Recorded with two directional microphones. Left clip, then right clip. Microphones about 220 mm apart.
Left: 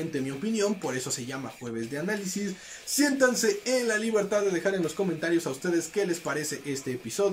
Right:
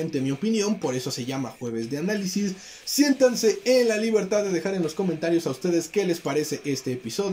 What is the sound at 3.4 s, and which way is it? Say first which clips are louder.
Speech: right 6 dB; 10° right (ahead or behind).